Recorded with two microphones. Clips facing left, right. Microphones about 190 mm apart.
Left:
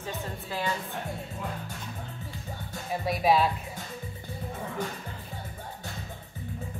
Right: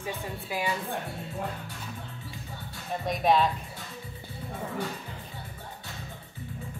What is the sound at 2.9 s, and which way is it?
Speech, 5° left (ahead or behind).